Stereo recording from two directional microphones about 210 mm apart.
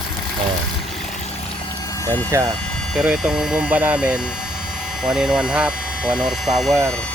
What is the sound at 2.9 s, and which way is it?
Speech, 5° right (ahead or behind).